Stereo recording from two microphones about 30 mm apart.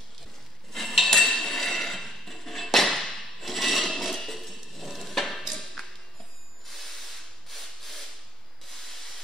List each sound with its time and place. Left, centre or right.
0.7 s dishes: centre
5.5 s a sound: centre
6.7 s rub: centre
8.6 s spray: centre